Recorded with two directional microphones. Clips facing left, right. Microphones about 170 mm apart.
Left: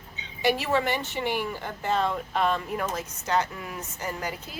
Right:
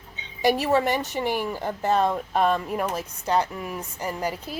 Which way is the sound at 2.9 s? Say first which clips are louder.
Right 2 dB; 30° right (ahead or behind).